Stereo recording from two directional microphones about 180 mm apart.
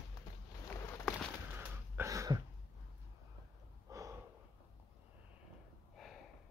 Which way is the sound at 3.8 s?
15° right (ahead or behind).